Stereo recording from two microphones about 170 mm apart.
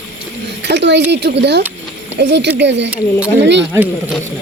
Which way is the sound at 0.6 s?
90° right.